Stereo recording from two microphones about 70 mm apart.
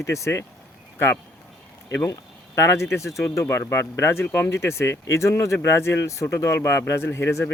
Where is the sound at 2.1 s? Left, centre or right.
Left.